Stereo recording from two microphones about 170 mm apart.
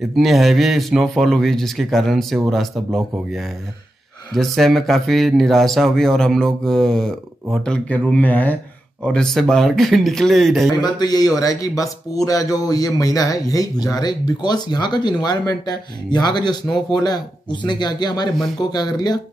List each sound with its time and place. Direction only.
0.1 s speech: centre (ahead or behind)
4.3 s speech: centre (ahead or behind)
10.8 s speech: 25° left (ahead or behind)